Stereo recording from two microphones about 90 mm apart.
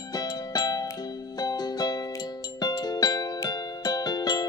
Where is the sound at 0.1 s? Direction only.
45° left (ahead or behind).